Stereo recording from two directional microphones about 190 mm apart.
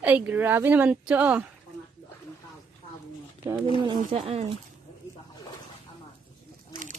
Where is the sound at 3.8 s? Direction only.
30° right (ahead or behind).